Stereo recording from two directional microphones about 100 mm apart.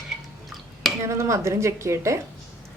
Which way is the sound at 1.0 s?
30° right (ahead or behind).